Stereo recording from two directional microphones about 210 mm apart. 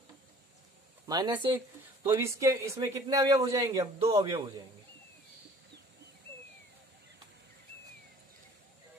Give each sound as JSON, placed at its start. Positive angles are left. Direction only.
{"t": 1.0, "sound": "speech", "side_deg": -20}